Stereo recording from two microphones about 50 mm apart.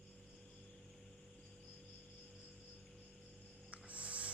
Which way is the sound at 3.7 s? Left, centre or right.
Right.